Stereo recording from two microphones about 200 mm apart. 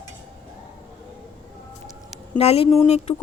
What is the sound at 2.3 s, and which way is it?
Speech, 30° left (ahead or behind).